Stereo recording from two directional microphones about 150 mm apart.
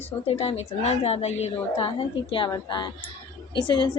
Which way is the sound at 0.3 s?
40° left (ahead or behind).